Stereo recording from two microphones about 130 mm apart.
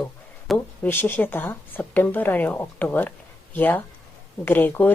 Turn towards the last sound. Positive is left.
turn(degrees=15)  # may be behind; listen again after turning